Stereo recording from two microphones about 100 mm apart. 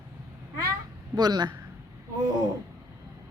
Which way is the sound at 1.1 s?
45° right (ahead or behind).